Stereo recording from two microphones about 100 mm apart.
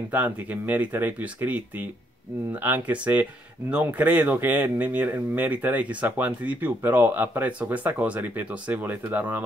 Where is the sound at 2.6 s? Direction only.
15° right (ahead or behind).